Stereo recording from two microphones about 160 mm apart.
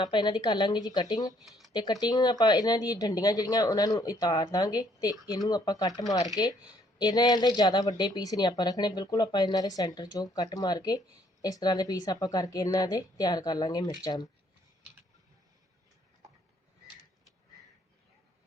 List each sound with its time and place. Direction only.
0.0 s speech: 30° left (ahead or behind)
1.4 s a sound: centre (ahead or behind)
1.7 s speech: 25° left (ahead or behind)